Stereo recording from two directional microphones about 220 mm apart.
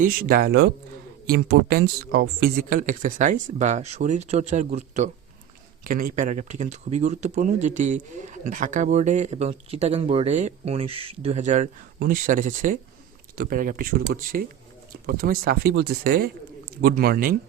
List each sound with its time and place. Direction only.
0.0 s speech: 40° right (ahead or behind)